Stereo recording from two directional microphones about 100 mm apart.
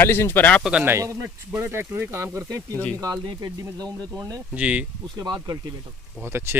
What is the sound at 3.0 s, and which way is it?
Speech, 40° right (ahead or behind).